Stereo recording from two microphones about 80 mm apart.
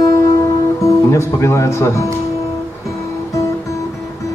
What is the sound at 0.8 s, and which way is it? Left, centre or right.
Speech, left.